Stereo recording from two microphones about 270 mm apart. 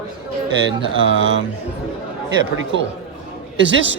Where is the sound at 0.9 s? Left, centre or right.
Right.